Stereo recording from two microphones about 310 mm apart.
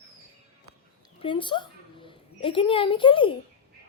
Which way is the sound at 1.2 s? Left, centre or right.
Centre.